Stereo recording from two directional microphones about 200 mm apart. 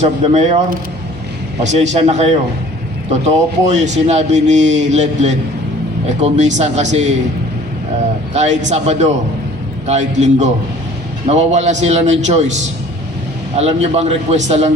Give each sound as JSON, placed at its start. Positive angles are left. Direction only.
{"t": 0.0, "sound": "a man's voice", "side_deg": -35}
{"t": 8.3, "sound": "a man's voice", "side_deg": -35}
{"t": 13.6, "sound": "a man's voice", "side_deg": -30}